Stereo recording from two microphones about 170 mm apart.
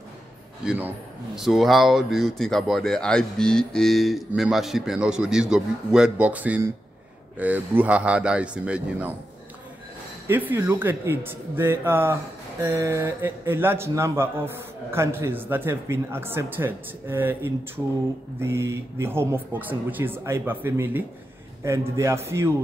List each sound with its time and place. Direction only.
0.7 s speech: 5° right (ahead or behind)
10.2 s speech: 10° right (ahead or behind)